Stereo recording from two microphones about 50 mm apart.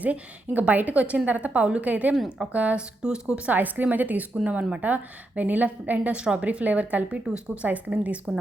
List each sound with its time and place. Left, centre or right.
0.0 s a woman's voice: right
3.0 s speech: centre
3.5 s a woman's voice: right